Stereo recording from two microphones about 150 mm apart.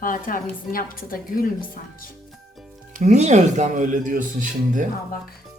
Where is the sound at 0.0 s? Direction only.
65° left (ahead or behind).